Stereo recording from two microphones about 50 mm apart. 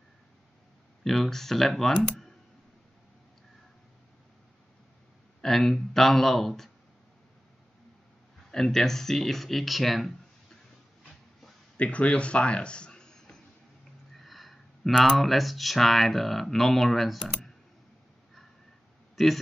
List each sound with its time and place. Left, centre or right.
1.0 s speech: centre
5.4 s speech: centre
8.5 s speech: centre
11.7 s speech: left
14.2 s a sound: centre
15.0 s speech: centre
19.2 s speech: centre